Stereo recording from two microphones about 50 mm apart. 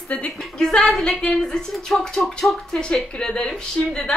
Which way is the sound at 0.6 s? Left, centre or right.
Centre.